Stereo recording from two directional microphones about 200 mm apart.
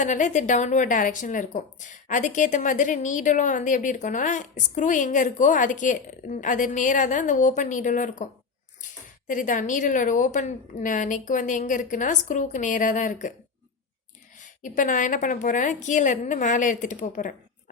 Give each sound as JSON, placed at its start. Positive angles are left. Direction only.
{"t": 0.0, "sound": "speech", "side_deg": 40}
{"t": 14.4, "sound": "speech", "side_deg": 40}